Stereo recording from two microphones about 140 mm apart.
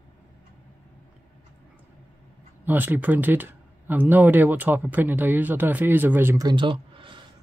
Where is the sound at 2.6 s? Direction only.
15° right (ahead or behind).